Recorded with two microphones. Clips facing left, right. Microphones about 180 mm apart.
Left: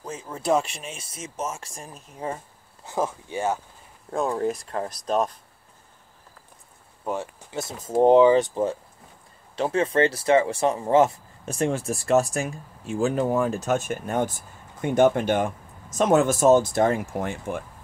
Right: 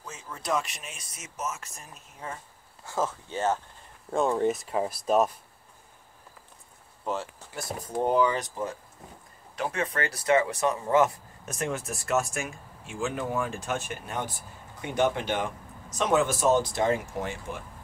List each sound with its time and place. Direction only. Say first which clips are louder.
0.0 s speech: left 8 dB; 35° left (ahead or behind)
2.8 s speech: left 3 dB; 15° left (ahead or behind); by 5.4 s 5° right (ahead or behind)
7.5 s speech: left 7 dB; 20° left (ahead or behind); by 17.6 s 55° left (ahead or behind)